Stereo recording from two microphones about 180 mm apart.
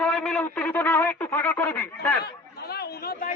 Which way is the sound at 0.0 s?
5° left (ahead or behind).